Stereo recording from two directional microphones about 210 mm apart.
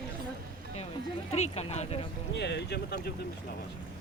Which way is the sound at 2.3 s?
55° left (ahead or behind).